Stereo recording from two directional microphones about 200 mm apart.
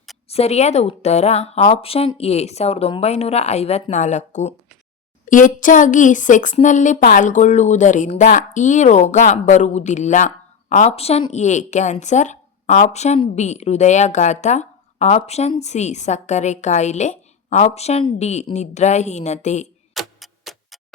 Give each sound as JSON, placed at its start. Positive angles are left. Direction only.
{"t": 0.3, "sound": "speech", "side_deg": 30}
{"t": 19.9, "sound": "clock", "side_deg": 0}